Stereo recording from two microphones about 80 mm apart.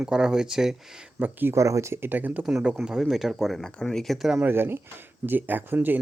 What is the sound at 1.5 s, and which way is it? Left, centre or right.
Speech, right.